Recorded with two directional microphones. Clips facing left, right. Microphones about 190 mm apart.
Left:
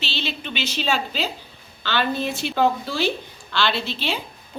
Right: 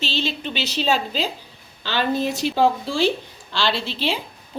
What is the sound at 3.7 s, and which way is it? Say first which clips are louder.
Speech: right 1 dB; 90° right.